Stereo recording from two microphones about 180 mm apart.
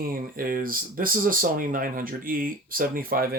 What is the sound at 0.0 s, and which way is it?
Speech, 55° right (ahead or behind).